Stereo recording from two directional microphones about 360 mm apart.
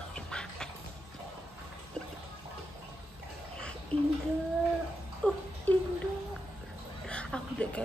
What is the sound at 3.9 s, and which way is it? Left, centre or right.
Child singing, centre.